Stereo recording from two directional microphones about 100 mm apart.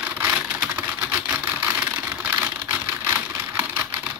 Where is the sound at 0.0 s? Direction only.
20° right (ahead or behind).